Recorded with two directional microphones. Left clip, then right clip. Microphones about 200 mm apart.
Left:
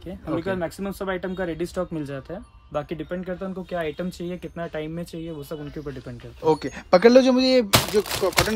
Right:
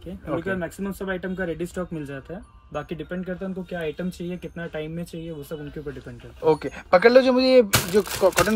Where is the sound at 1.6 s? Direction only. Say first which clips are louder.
Left 3 dB; 45° left (ahead or behind).